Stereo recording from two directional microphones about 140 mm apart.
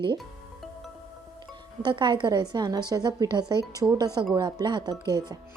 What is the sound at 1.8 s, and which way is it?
A woman's voice, 35° right (ahead or behind).